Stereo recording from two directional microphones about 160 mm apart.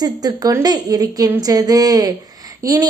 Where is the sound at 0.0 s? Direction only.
25° right (ahead or behind).